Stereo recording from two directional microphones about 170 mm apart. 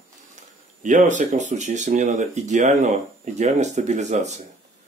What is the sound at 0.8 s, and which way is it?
Speech, 45° right (ahead or behind).